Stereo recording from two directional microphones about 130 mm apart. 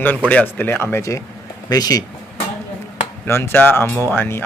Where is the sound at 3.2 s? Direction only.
20° left (ahead or behind).